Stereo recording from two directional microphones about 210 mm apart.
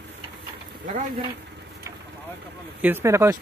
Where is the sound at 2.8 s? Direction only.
10° right (ahead or behind).